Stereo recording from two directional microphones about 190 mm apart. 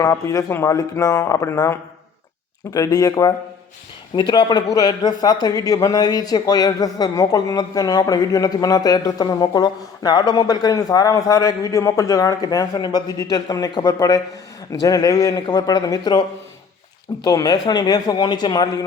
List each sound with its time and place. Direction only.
0.0 s a man's voice: 15° left (ahead or behind)
17.2 s a man's voice: 20° left (ahead or behind)